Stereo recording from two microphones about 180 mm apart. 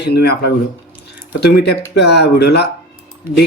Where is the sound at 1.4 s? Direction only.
65° left (ahead or behind).